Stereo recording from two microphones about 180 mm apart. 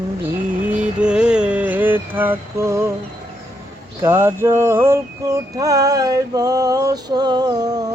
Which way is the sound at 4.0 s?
15° right (ahead or behind).